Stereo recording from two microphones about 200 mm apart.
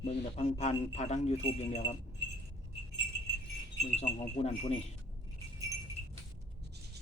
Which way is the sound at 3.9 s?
30° left (ahead or behind).